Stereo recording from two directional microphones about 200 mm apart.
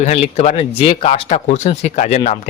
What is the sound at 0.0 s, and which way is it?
Speech, 35° left (ahead or behind).